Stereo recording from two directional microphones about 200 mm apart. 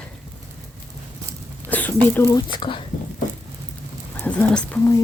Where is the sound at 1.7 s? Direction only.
10° left (ahead or behind).